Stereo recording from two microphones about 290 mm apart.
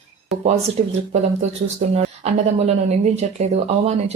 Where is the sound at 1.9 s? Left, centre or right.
Right.